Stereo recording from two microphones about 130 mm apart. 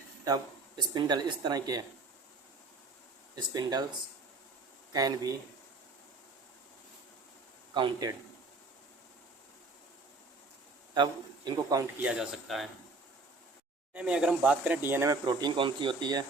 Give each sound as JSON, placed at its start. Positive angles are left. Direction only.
{"t": 0.8, "sound": "speech", "side_deg": -35}
{"t": 3.3, "sound": "speech", "side_deg": -30}
{"t": 4.9, "sound": "speech", "side_deg": -30}
{"t": 7.7, "sound": "speech", "side_deg": -35}
{"t": 10.9, "sound": "a man's voice", "side_deg": -35}
{"t": 12.0, "sound": "speech", "side_deg": -5}
{"t": 13.9, "sound": "speech", "side_deg": -10}
{"t": 15.3, "sound": "speech", "side_deg": -35}